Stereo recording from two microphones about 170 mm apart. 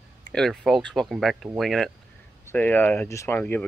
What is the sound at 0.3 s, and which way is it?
Speech, centre (ahead or behind).